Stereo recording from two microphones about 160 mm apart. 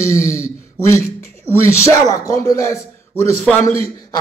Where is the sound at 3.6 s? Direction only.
40° right (ahead or behind).